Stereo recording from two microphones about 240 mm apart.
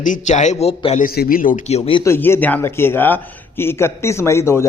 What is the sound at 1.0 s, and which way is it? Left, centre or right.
Speech, left.